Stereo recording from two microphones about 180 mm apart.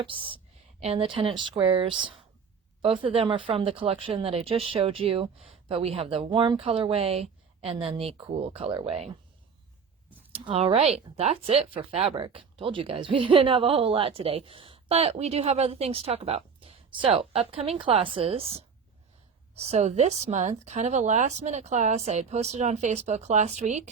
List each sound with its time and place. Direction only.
0.0 s speech: 30° right (ahead or behind)
10.3 s speech: 35° right (ahead or behind)